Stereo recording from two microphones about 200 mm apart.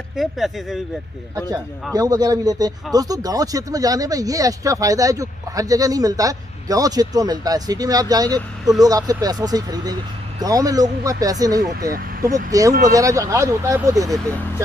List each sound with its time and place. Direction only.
0.1 s speech: centre (ahead or behind)
2.0 s speech: 20° right (ahead or behind)